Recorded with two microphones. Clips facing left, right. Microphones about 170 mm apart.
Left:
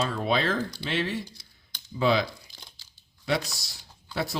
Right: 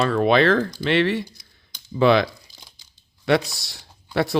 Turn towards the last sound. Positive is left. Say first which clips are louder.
# right 10 dB
turn(degrees=-65)  # may be behind; listen again after turning